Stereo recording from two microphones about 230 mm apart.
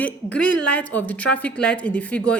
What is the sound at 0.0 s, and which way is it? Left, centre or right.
A woman's voice, centre.